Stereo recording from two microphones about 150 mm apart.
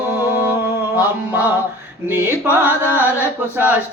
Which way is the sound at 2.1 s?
15° right (ahead or behind).